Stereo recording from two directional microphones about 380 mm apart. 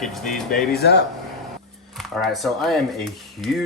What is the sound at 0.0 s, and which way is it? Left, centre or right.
Speech, centre.